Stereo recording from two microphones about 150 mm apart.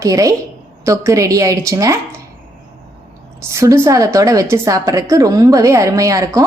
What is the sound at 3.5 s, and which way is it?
A woman's voice, 20° right (ahead or behind).